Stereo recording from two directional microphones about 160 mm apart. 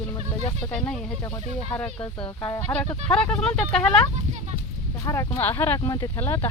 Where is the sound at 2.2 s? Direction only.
30° left (ahead or behind).